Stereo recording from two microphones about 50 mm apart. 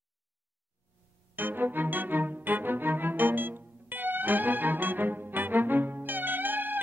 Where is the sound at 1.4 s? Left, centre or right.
Right.